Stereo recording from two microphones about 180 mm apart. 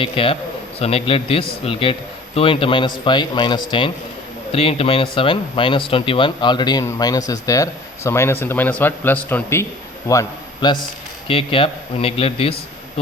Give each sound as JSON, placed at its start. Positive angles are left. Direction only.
{"t": 0.0, "sound": "a man's voice", "side_deg": 30}